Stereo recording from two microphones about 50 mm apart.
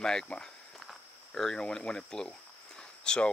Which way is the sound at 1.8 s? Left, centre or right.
Centre.